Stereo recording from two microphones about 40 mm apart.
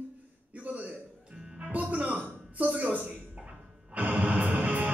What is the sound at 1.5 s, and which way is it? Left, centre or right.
Music, right.